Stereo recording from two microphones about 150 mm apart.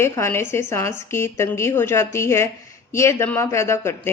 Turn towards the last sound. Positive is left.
turn(degrees=15)  # may be behind; listen again after turning